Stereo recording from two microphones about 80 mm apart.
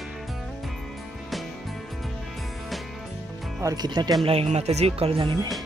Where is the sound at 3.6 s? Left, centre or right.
Right.